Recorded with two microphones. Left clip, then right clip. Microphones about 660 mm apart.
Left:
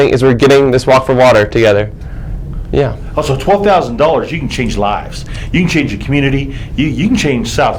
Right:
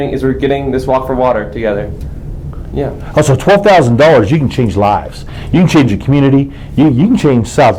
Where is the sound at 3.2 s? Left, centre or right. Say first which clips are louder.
Right 3 dB; right.